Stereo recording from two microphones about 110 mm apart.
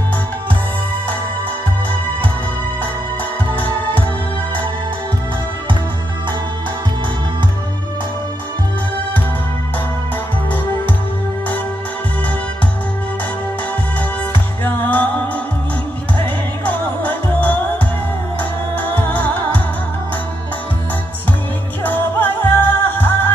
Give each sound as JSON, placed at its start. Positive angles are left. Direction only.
{"t": 3.5, "sound": "music", "side_deg": 15}
{"t": 14.6, "sound": "music", "side_deg": 15}
{"t": 16.6, "sound": "music", "side_deg": 15}
{"t": 18.9, "sound": "music", "side_deg": 15}
{"t": 21.8, "sound": "music", "side_deg": 15}